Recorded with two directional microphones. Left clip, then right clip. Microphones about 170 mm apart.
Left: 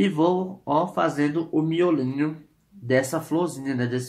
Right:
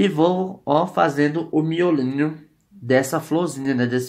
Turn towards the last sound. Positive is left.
turn(degrees=-40)  # may be behind; listen again after turning